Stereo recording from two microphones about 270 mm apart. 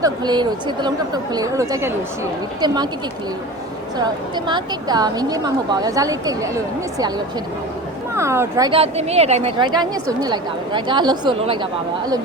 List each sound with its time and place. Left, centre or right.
0.0 s a woman's voice: centre
3.9 s a woman's voice: centre
8.1 s a woman's voice: centre